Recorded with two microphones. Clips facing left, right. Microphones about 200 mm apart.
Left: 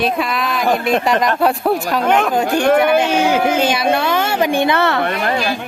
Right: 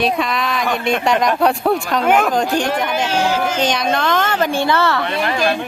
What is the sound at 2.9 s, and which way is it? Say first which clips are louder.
Speech: left 4 dB; 55° left (ahead or behind).